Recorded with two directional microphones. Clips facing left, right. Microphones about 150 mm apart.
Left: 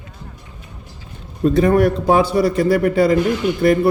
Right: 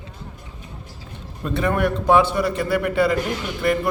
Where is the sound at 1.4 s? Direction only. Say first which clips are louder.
Left 8 dB; 40° left (ahead or behind).